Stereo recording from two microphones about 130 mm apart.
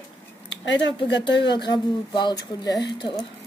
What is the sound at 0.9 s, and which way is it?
Speech, 35° left (ahead or behind).